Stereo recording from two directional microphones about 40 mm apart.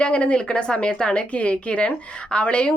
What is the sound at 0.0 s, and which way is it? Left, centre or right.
A woman's voice, left.